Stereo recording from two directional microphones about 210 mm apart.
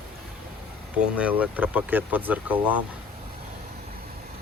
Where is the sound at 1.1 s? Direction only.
5° right (ahead or behind).